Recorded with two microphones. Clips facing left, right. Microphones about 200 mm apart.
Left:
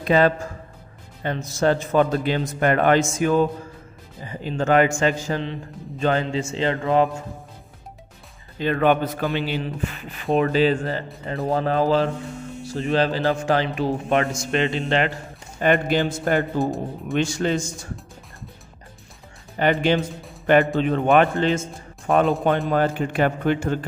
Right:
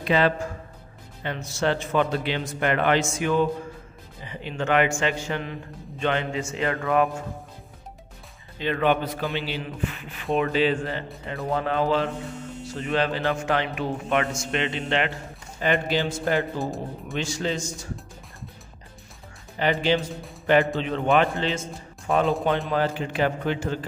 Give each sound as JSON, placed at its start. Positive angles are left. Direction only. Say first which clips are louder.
{"t": 0.0, "sound": "a man's voice", "louder": "left 4 dB", "side_deg": 45}
{"t": 5.4, "sound": "mantra", "louder": "left 4 dB", "side_deg": 35}
{"t": 8.5, "sound": "a man's voice", "louder": "left 4 dB", "side_deg": 45}
{"t": 15.6, "sound": "a man's voice", "louder": "left 4 dB", "side_deg": 50}
{"t": 19.6, "sound": "a man's voice", "louder": "left 3 dB", "side_deg": 55}